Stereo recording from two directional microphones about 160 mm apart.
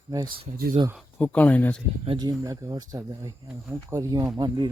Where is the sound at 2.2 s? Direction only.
25° right (ahead or behind).